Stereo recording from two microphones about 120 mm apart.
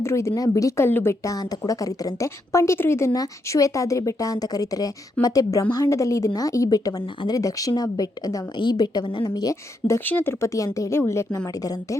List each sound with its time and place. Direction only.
0.0 s a woman's voice: 20° left (ahead or behind)